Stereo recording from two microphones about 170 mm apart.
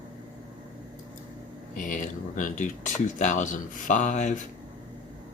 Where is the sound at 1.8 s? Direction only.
50° left (ahead or behind).